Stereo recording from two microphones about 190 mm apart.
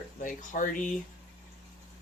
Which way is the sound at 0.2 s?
45° left (ahead or behind).